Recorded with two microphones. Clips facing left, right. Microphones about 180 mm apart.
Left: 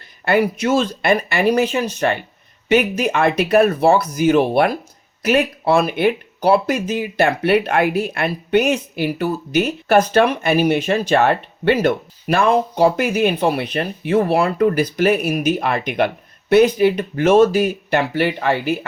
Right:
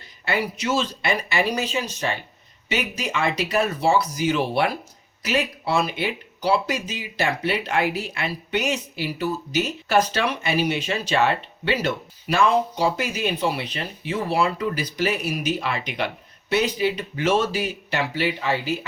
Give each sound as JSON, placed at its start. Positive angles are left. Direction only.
{"t": 0.3, "sound": "speech", "side_deg": 55}